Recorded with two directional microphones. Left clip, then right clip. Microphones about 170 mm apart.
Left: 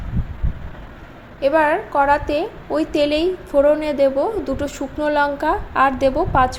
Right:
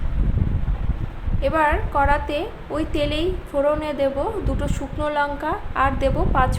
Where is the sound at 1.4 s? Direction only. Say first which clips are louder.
Left 4 dB; 25° left (ahead or behind).